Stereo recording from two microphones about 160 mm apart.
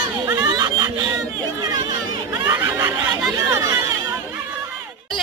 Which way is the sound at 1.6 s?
25° right (ahead or behind).